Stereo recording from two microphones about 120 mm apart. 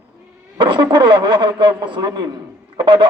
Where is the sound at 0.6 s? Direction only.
40° right (ahead or behind).